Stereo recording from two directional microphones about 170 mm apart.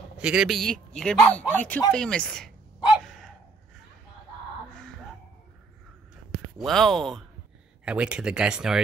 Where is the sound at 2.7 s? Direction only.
Centre (ahead or behind).